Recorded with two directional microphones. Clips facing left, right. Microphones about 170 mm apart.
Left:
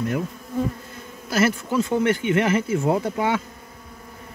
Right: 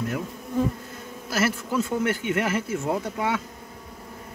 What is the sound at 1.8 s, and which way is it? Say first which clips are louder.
Speech: left 4 dB; 5° right (ahead or behind).